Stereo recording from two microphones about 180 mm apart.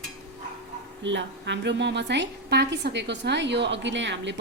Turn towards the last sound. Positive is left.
turn(degrees=-80)